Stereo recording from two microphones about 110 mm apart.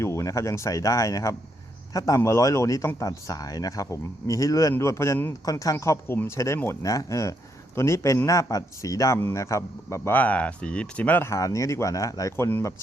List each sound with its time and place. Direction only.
0.0 s a man's voice: 25° left (ahead or behind)
12.5 s a man's voice: 20° left (ahead or behind)